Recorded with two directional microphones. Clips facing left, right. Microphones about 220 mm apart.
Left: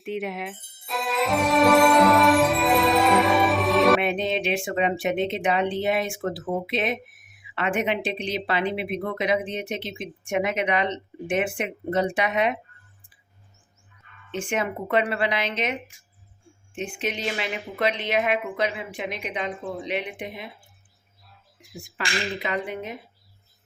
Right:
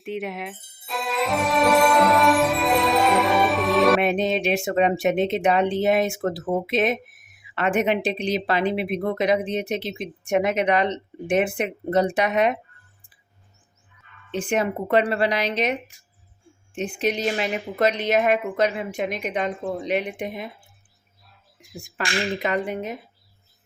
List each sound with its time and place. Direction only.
0.0 s music: centre (ahead or behind)
4.0 s speech: 40° right (ahead or behind)
14.3 s a woman's voice: 35° right (ahead or behind)
21.8 s a woman's voice: 45° right (ahead or behind)